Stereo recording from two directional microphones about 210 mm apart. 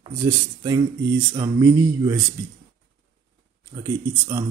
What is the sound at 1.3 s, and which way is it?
Speech, 20° right (ahead or behind).